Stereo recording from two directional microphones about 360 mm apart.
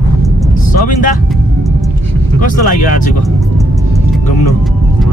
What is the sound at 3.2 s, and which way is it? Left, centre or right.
Vehicle, centre.